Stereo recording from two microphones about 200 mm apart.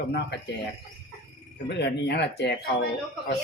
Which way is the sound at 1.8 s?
55° left (ahead or behind).